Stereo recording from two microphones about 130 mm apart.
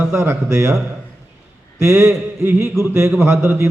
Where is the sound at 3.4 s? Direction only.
20° right (ahead or behind).